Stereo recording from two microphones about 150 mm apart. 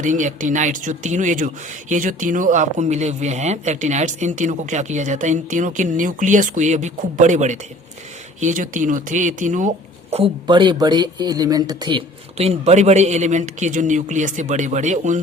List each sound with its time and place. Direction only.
0.0 s speech: 55° right (ahead or behind)
10.4 s speech: 30° right (ahead or behind)
12.4 s speech: 45° right (ahead or behind)